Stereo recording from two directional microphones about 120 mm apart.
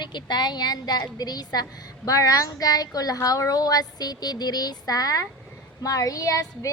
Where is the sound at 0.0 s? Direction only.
40° left (ahead or behind).